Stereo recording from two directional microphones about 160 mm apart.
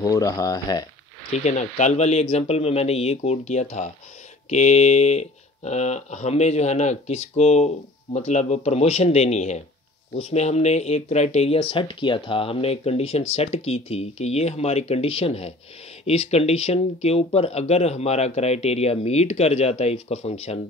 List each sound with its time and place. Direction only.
0.0 s speech: 20° left (ahead or behind)
1.3 s speech: 45° left (ahead or behind)